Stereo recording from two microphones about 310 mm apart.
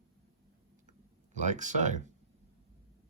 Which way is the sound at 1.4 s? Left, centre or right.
Right.